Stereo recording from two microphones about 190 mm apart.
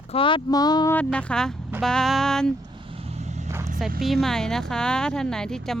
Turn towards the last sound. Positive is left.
turn(degrees=5)  # may be behind; listen again after turning